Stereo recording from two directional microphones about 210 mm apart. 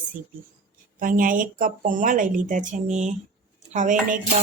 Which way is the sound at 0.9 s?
40° right (ahead or behind).